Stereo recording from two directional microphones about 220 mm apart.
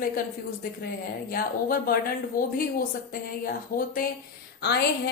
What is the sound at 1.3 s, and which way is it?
A woman's voice, 40° left (ahead or behind).